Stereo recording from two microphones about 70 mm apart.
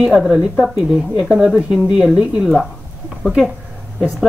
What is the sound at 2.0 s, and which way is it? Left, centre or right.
Speech, centre.